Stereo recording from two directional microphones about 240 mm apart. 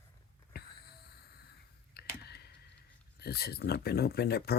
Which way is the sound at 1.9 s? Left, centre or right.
Left.